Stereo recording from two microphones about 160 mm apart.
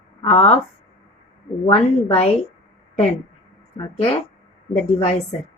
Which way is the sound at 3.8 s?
40° left (ahead or behind).